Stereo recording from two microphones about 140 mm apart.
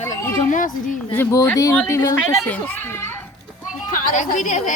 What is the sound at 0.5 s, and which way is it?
Speech, 70° left (ahead or behind).